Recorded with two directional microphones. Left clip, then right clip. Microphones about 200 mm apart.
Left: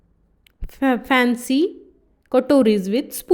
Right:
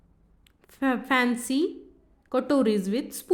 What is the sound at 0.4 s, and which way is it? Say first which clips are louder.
A woman's voice: left 7 dB; 25° left (ahead or behind).